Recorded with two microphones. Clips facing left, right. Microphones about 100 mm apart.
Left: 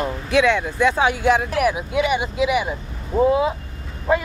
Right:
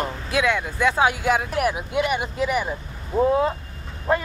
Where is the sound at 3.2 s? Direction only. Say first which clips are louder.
Left 2 dB; 5° left (ahead or behind).